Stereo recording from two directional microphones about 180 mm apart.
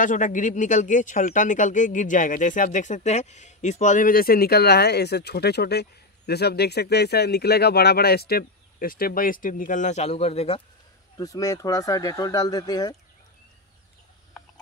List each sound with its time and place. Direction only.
0.0 s speech: 45° left (ahead or behind)
11.1 s speech: 20° left (ahead or behind)